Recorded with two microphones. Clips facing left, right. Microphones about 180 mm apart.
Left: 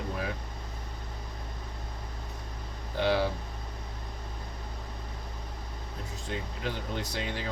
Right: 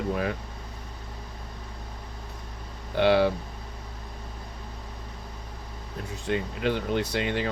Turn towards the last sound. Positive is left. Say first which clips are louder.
# right 7 dB
turn(degrees=-65)  # may be behind; listen again after turning